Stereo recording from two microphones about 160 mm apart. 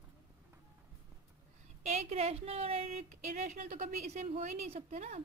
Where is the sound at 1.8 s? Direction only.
45° right (ahead or behind).